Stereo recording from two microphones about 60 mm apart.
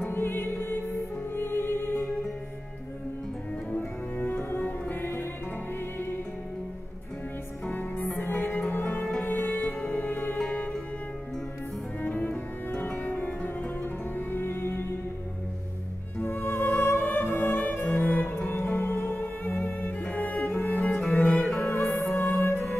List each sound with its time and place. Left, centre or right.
0.0 s music: left
3.7 s music: left
7.7 s music: left
10.4 s music: centre
12.0 s cello: left
12.9 s music: left
16.3 s music: left
21.5 s music: left